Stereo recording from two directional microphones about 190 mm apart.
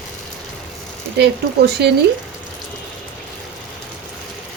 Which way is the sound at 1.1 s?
60° right (ahead or behind).